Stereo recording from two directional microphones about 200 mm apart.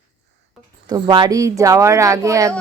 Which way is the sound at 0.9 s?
20° right (ahead or behind).